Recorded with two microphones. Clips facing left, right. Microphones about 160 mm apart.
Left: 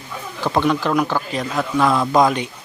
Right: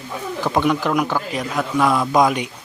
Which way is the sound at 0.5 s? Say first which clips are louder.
Left 1 dB; 10° right (ahead or behind).